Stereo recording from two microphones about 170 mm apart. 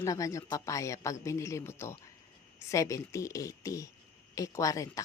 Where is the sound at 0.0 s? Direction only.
20° left (ahead or behind).